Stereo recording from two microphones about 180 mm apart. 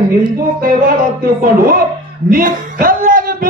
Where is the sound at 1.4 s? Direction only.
55° right (ahead or behind).